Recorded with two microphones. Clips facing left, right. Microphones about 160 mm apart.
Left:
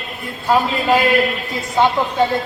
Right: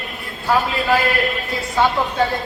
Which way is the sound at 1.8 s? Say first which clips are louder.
Left 2 dB; 20° left (ahead or behind).